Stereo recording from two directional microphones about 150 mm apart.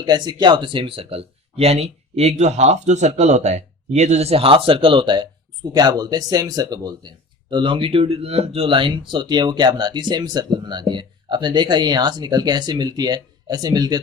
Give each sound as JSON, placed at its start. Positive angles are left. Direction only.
{"t": 0.0, "sound": "speech", "side_deg": -25}